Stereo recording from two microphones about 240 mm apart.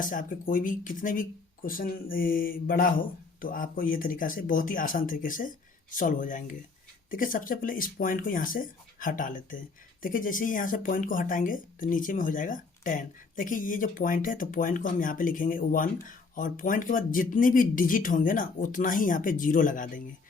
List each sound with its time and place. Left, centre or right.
0.0 s speech: left